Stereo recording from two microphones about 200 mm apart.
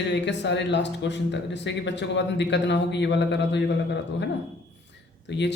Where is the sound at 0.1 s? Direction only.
60° left (ahead or behind).